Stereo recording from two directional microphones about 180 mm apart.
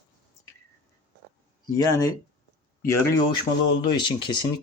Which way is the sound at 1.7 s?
20° left (ahead or behind).